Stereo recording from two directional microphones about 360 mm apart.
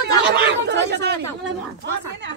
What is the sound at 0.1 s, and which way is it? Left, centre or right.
Chatter, right.